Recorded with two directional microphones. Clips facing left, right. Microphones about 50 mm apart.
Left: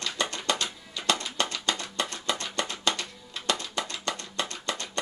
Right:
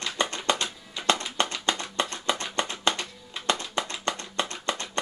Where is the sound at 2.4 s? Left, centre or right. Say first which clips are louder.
Right 2 dB; right.